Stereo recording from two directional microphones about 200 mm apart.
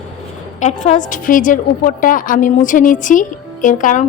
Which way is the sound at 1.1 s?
40° left (ahead or behind).